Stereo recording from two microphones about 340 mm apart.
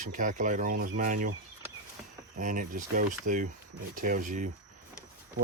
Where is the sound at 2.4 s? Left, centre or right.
Right.